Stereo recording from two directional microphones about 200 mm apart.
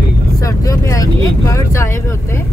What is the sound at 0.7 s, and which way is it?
Speech, 15° left (ahead or behind).